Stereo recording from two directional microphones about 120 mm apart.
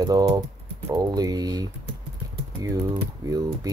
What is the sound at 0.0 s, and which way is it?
Speech, 35° right (ahead or behind).